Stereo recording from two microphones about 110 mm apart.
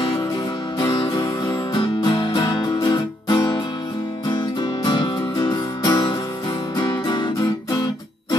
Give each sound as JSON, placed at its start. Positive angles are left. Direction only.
{"t": 0.7, "sound": "music", "side_deg": 40}
{"t": 6.8, "sound": "guitar", "side_deg": 40}